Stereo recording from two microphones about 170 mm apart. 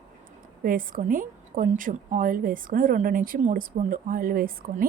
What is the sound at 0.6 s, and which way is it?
A woman's voice, 55° right (ahead or behind).